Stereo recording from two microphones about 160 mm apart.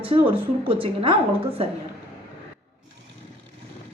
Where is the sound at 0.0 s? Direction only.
35° right (ahead or behind).